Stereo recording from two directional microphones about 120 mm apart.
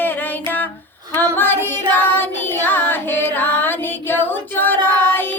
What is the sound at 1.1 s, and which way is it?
Child singing, 15° left (ahead or behind).